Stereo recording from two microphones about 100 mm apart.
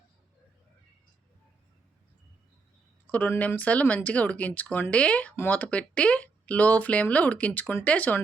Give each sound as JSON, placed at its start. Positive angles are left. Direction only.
{"t": 3.1, "sound": "speech", "side_deg": 15}